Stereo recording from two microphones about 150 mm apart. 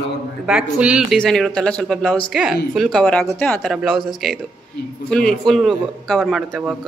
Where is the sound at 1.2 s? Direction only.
5° left (ahead or behind).